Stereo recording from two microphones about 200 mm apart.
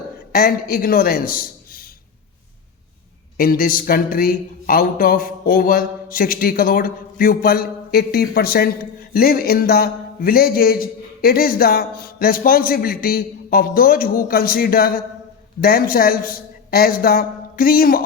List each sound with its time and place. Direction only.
0.3 s a man's voice: 45° left (ahead or behind)
3.3 s speech: 45° left (ahead or behind)